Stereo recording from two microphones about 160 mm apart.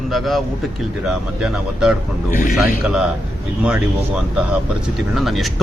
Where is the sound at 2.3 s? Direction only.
60° left (ahead or behind).